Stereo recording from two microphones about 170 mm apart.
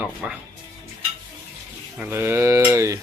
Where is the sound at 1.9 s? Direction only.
10° right (ahead or behind).